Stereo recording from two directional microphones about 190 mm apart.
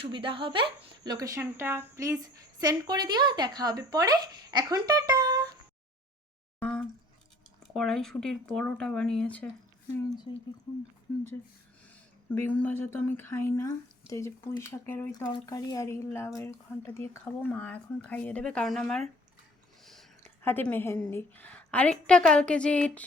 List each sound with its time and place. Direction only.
0.0 s speech: 25° right (ahead or behind)
6.6 s a sound: 5° left (ahead or behind)
7.7 s speech: 5° left (ahead or behind)
11.9 s a woman's voice: 10° left (ahead or behind)
19.8 s a sound: centre (ahead or behind)
20.4 s a woman's voice: 10° left (ahead or behind)